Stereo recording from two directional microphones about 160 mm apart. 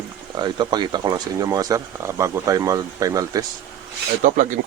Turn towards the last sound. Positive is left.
turn(degrees=-55)  # may be behind; listen again after turning